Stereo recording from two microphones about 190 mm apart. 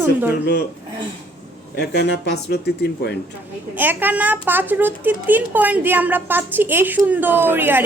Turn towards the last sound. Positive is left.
turn(degrees=-10)  # may be behind; listen again after turning